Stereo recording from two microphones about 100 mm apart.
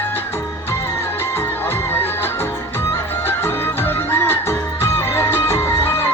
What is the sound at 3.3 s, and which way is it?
Music, 25° left (ahead or behind).